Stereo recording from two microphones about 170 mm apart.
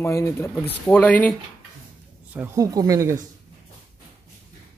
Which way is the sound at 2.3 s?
15° right (ahead or behind).